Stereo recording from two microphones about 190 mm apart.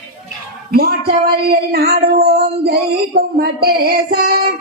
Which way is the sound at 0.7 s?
55° right (ahead or behind).